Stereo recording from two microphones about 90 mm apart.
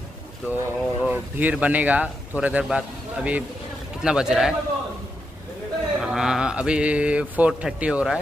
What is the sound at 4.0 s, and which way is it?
Speech, 5° right (ahead or behind).